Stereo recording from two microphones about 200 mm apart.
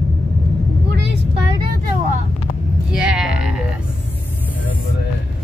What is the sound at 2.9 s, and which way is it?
Sheep, 5° right (ahead or behind).